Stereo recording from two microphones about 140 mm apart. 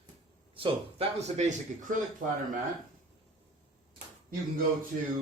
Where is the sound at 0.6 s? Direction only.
50° right (ahead or behind).